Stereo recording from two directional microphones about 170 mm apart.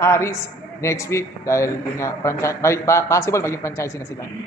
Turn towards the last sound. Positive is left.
turn(degrees=15)  # may be behind; listen again after turning